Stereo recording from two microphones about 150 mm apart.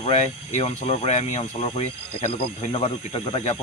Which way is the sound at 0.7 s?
45° left (ahead or behind).